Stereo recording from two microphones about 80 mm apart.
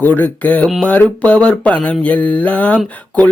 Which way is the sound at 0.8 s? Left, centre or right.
Centre.